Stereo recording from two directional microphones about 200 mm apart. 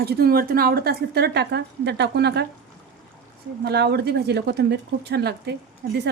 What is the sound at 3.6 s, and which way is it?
A woman's voice, 55° right (ahead or behind).